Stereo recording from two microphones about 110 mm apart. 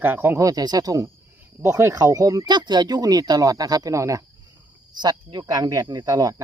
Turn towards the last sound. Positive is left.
turn(degrees=-35)  # may be behind; listen again after turning